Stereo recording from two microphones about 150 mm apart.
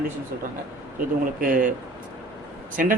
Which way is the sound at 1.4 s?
65° right (ahead or behind).